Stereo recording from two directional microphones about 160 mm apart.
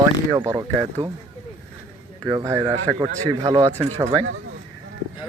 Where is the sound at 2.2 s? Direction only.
20° right (ahead or behind).